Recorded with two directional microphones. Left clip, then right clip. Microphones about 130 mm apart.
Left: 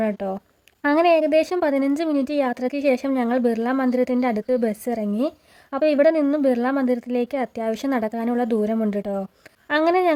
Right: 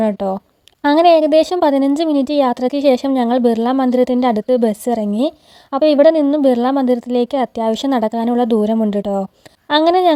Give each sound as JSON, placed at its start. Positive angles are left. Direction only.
{"t": 0.0, "sound": "a woman's voice", "side_deg": -40}